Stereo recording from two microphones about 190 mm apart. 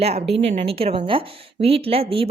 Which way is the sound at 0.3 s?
30° right (ahead or behind).